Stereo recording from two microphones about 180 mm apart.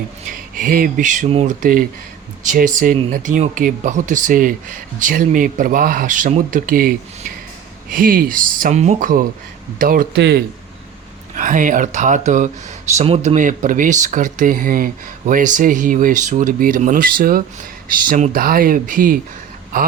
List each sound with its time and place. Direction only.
0.5 s speech: 50° right (ahead or behind)
1.3 s speech: 35° right (ahead or behind)
2.4 s speech: 45° right (ahead or behind)
10.2 s speech: 65° right (ahead or behind)
11.3 s speech: 45° right (ahead or behind)